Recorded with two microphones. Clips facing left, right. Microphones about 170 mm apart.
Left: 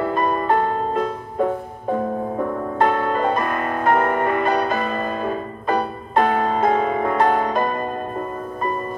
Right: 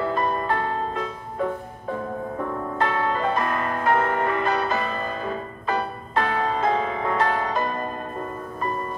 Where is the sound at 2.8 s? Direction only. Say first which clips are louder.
Left 5 dB; 50° left (ahead or behind).